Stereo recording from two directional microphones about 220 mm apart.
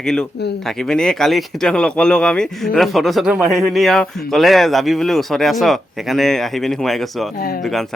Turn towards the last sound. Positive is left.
turn(degrees=0)  # may be behind; listen again after turning